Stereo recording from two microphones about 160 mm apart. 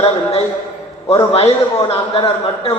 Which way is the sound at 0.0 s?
40° left (ahead or behind).